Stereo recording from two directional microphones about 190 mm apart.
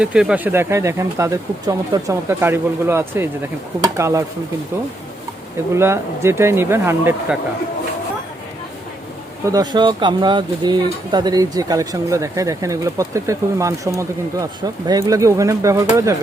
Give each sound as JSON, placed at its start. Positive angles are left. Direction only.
{"t": 0.0, "sound": "speech", "side_deg": -5}
{"t": 5.7, "sound": "speech", "side_deg": -15}
{"t": 9.5, "sound": "speech", "side_deg": -20}